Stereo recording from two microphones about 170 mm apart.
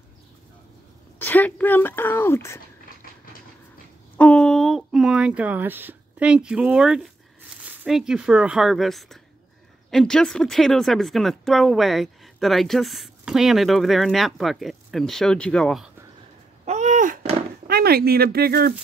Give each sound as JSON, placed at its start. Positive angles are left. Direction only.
{"t": 1.2, "sound": "a woman's voice", "side_deg": 10}
{"t": 4.2, "sound": "speech", "side_deg": 5}
{"t": 16.6, "sound": "a sound", "side_deg": -40}
{"t": 17.6, "sound": "speech", "side_deg": -65}